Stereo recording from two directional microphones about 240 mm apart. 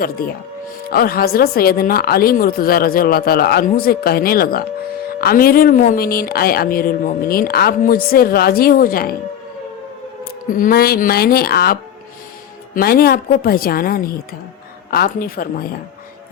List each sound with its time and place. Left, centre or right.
0.2 s speech: left
10.5 s speech: left